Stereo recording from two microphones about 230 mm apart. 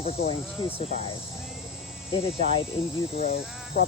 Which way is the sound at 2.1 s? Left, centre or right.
Left.